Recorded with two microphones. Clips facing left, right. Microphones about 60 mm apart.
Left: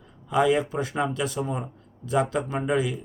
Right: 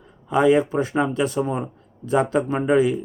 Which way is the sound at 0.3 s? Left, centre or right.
Right.